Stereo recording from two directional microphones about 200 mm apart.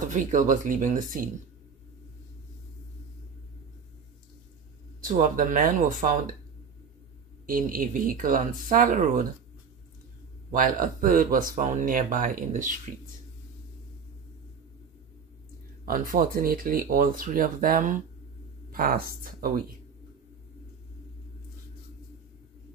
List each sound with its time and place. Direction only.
0.1 s speech: 40° right (ahead or behind)
5.0 s speech: 40° right (ahead or behind)
7.4 s speech: 45° right (ahead or behind)
10.5 s speech: 40° right (ahead or behind)
15.8 s speech: 45° right (ahead or behind)